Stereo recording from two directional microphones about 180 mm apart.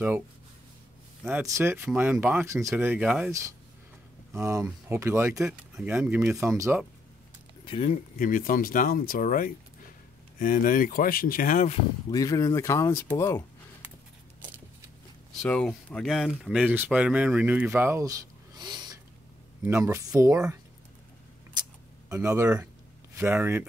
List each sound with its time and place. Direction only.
1.2 s speech: 15° right (ahead or behind)
4.4 s speech: 15° right (ahead or behind)
7.6 s speech: 30° left (ahead or behind)
8.2 s speech: 50° left (ahead or behind)
12.1 s speech: 20° left (ahead or behind)
15.4 s speech: 5° left (ahead or behind); by 20.3 s 20° right (ahead or behind)
22.1 s speech: 15° right (ahead or behind)